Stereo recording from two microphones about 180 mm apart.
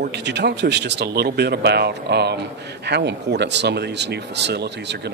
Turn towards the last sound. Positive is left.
turn(degrees=-70)  # may be behind; listen again after turning